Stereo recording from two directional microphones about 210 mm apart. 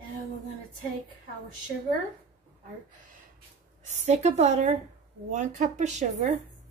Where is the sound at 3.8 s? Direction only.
35° right (ahead or behind).